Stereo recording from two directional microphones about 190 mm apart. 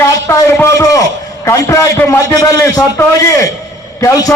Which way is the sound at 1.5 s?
15° left (ahead or behind).